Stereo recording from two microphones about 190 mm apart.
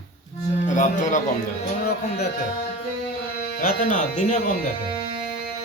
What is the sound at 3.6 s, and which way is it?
Speech, 40° left (ahead or behind).